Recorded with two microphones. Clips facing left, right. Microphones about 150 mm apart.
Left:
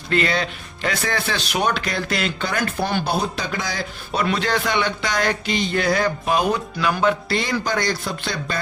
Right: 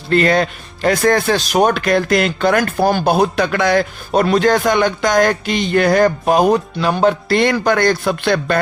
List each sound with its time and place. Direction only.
0.1 s speech: 45° right (ahead or behind)
6.7 s speech: 30° right (ahead or behind)
7.3 s speech: 55° right (ahead or behind)